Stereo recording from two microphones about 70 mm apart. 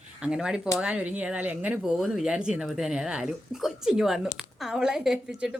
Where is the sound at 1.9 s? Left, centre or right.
Centre.